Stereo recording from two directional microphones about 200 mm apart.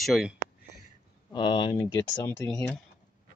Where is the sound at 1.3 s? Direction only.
25° left (ahead or behind); by 2.8 s 10° left (ahead or behind).